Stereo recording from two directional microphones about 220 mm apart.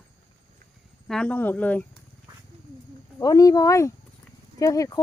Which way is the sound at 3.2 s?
15° left (ahead or behind).